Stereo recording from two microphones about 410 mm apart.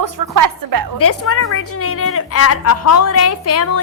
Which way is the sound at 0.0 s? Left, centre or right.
Right.